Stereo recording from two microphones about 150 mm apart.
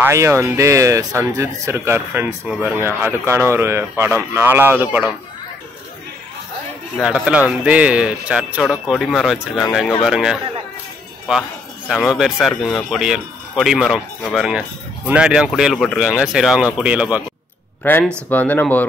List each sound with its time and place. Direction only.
0.0 s speech: 20° right (ahead or behind)
7.0 s a man's voice: 5° right (ahead or behind)
17.8 s speech: 15° left (ahead or behind)